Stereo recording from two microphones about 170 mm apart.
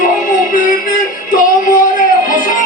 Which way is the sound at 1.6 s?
50° left (ahead or behind).